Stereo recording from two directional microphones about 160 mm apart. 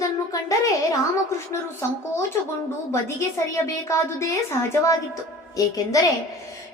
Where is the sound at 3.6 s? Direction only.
20° left (ahead or behind).